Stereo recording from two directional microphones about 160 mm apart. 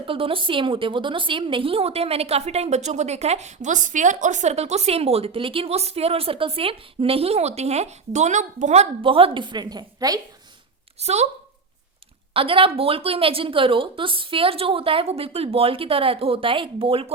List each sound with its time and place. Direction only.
0.0 s a woman's voice: 35° right (ahead or behind)
11.0 s speech: 45° right (ahead or behind)
12.3 s a woman's voice: 35° right (ahead or behind)